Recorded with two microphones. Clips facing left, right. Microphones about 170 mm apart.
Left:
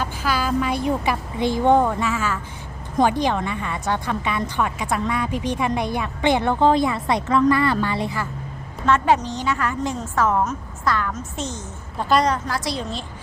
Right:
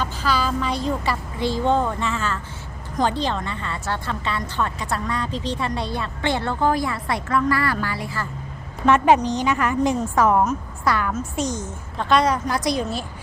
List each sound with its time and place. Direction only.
0.0 s vehicle: 10° left (ahead or behind)
0.8 s a woman's voice: 15° left (ahead or behind)
8.9 s a woman's voice: 15° right (ahead or behind)
11.9 s a woman's voice: 5° left (ahead or behind)
12.5 s a woman's voice: 20° right (ahead or behind)